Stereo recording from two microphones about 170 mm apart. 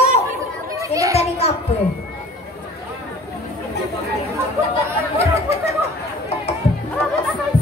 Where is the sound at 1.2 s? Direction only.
35° left (ahead or behind).